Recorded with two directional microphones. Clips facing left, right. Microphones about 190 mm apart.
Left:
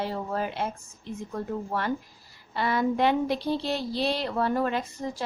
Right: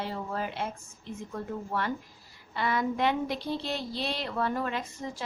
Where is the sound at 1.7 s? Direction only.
40° left (ahead or behind).